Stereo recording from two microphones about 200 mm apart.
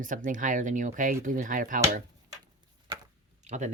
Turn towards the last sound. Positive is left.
turn(degrees=-35)  # may be behind; listen again after turning